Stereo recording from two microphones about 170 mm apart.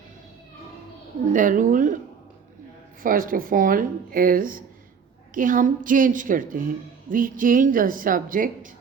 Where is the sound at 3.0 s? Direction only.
55° right (ahead or behind).